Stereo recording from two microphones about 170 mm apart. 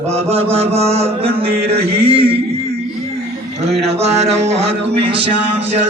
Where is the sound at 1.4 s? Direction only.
65° right (ahead or behind).